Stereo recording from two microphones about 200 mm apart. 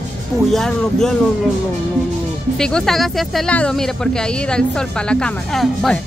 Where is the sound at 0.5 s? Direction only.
Centre (ahead or behind).